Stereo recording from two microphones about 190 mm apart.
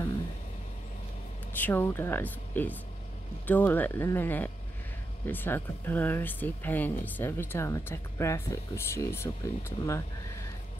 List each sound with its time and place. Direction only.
1.6 s speech: 10° left (ahead or behind)